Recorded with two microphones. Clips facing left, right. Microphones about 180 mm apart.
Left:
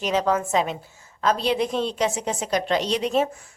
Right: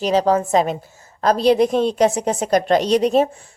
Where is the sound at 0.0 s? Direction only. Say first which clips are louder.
Right 6 dB; 35° right (ahead or behind).